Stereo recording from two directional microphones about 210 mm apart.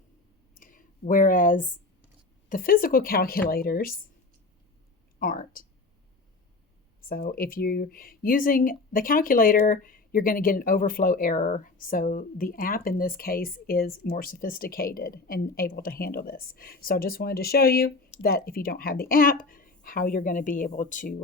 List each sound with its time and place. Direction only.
0.5 s clicking: 40° left (ahead or behind)
2.5 s speech: 40° left (ahead or behind)
5.2 s speech: 40° left (ahead or behind)
7.0 s speech: 45° left (ahead or behind)